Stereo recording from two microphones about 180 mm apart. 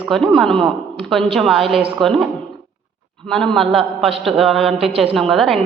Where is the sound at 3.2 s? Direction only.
5° left (ahead or behind).